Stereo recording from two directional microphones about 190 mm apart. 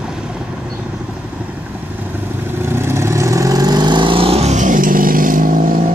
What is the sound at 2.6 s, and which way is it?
Vehicle, 15° right (ahead or behind).